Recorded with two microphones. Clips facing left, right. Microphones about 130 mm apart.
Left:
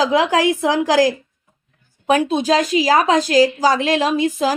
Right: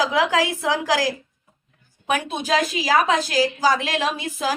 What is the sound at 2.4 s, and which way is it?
A woman's voice, 40° left (ahead or behind).